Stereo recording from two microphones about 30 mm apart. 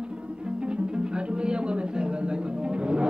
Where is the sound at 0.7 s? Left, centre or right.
Right.